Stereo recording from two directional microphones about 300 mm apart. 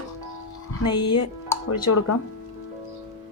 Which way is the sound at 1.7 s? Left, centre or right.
Left.